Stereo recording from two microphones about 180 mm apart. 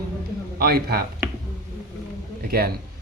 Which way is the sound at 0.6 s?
55° right (ahead or behind).